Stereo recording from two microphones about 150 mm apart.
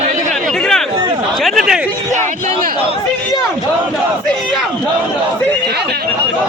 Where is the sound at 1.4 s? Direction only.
Centre (ahead or behind).